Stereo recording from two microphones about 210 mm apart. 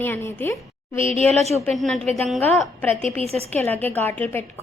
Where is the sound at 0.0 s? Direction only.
10° left (ahead or behind).